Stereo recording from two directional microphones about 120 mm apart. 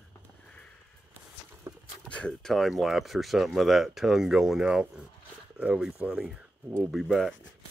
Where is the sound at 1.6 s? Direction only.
20° right (ahead or behind).